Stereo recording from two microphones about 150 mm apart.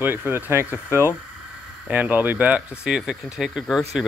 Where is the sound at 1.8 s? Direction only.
10° right (ahead or behind).